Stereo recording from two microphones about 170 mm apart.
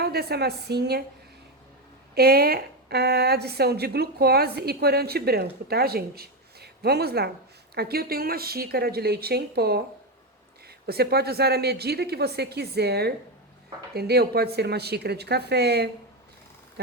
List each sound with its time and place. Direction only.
0.0 s a woman's voice: 70° right (ahead or behind)
2.1 s a woman's voice: 65° right (ahead or behind)
10.8 s a woman's voice: 70° right (ahead or behind)